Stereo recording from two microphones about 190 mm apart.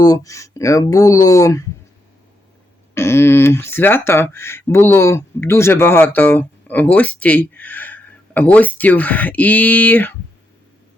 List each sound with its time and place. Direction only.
0.0 s speech: 20° left (ahead or behind)
2.9 s speech: 15° left (ahead or behind)